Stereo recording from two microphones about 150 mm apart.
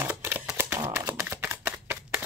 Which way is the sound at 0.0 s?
15° right (ahead or behind).